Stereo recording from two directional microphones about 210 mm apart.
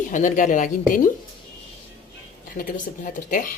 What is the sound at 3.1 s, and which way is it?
Speech, 40° left (ahead or behind).